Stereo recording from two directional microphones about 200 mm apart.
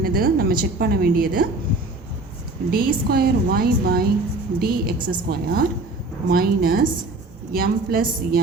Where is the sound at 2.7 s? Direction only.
45° right (ahead or behind).